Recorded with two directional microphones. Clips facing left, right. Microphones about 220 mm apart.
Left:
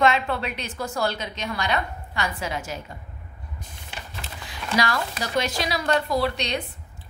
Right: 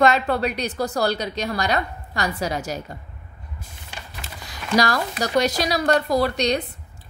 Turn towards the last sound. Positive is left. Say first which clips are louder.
# right 4 dB
turn(degrees=-40)  # may be behind; listen again after turning